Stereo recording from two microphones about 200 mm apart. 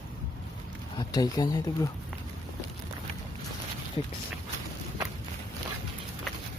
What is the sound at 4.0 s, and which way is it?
Speech, 25° left (ahead or behind).